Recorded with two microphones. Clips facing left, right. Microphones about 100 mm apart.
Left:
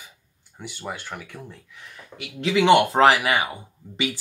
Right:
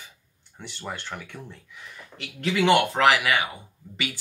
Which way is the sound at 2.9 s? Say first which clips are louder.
Left 3 dB; 30° left (ahead or behind).